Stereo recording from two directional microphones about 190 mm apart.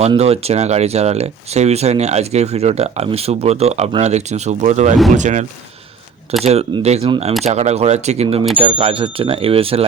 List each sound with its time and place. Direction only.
0.0 s speech: 35° right (ahead or behind)